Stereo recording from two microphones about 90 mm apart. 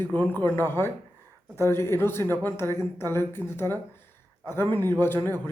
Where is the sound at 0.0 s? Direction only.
20° left (ahead or behind).